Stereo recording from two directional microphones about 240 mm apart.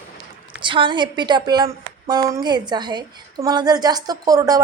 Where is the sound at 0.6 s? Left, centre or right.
Right.